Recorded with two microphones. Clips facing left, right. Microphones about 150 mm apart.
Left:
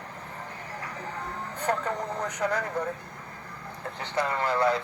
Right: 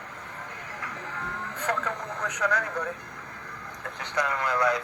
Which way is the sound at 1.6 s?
35° left (ahead or behind).